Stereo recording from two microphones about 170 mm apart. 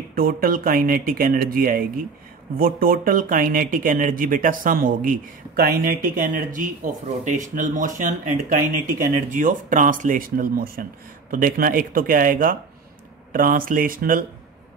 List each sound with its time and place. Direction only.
0.1 s speech: 55° right (ahead or behind)